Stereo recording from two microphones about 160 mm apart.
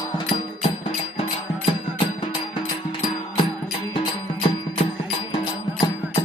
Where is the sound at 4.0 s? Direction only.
35° left (ahead or behind).